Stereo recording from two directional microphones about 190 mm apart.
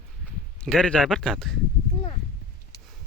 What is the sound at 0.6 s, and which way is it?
Speech, 5° left (ahead or behind).